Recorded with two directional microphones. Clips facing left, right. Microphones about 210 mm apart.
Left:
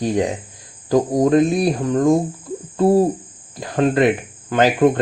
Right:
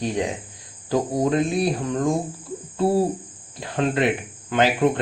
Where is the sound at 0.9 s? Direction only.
40° left (ahead or behind).